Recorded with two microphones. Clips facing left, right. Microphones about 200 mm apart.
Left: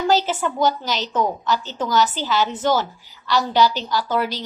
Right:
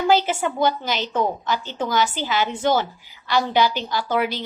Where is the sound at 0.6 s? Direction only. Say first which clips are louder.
Left 2 dB; 55° right (ahead or behind).